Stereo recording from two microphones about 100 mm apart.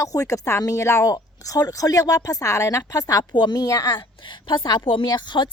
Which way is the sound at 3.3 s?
45° left (ahead or behind).